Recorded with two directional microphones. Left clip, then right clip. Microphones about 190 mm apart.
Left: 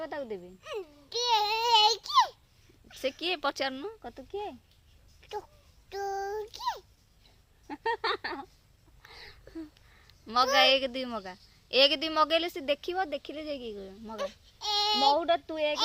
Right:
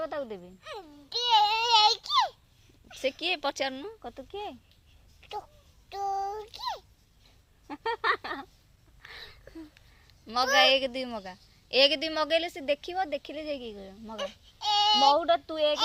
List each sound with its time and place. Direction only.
0.0 s babbling: 10° left (ahead or behind)
2.9 s a woman's voice: 10° left (ahead or behind)
5.2 s a sound: 15° left (ahead or behind)
5.9 s child singing: 20° left (ahead or behind)
7.7 s a sound: 10° left (ahead or behind)
10.1 s a woman's voice: 15° left (ahead or behind)